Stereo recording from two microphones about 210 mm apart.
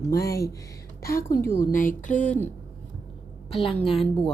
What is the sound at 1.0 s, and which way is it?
A woman's voice, 45° left (ahead or behind).